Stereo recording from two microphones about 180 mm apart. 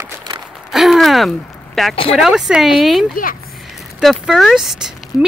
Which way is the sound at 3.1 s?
50° left (ahead or behind).